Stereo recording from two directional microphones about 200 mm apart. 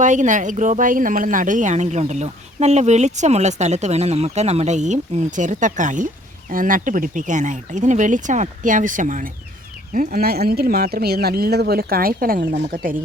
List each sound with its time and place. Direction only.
0.0 s speech: 40° right (ahead or behind)